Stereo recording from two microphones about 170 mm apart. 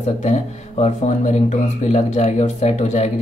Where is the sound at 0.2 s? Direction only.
40° left (ahead or behind).